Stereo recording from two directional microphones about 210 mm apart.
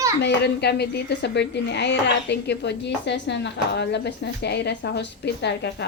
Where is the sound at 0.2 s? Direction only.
50° left (ahead or behind).